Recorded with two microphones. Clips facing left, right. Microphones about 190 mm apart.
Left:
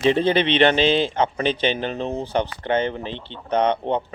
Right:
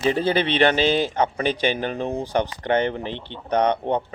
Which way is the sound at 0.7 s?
10° right (ahead or behind).